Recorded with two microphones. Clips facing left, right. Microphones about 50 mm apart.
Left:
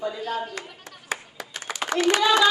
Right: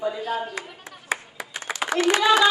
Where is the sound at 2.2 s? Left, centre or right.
Centre.